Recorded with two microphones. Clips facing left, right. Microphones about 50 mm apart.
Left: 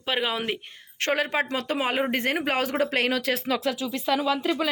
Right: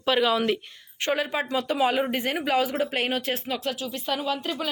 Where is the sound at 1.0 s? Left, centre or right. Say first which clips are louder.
Left 1 dB; left.